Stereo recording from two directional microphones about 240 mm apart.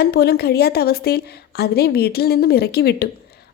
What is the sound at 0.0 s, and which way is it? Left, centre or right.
A woman's voice, left.